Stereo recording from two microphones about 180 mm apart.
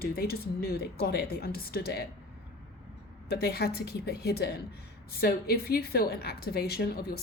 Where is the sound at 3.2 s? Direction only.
60° left (ahead or behind).